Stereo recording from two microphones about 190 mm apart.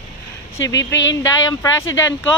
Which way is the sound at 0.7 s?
75° left (ahead or behind).